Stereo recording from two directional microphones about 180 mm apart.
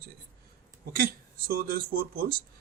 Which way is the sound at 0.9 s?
55° right (ahead or behind).